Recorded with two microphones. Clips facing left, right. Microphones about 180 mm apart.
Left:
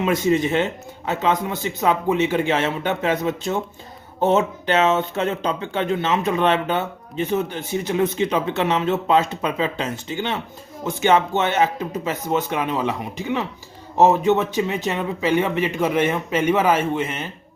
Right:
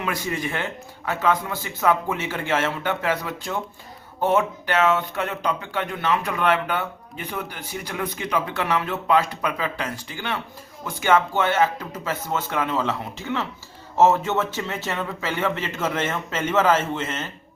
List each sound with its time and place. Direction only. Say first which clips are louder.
0.0 s speech: left 8 dB; 20° left (ahead or behind)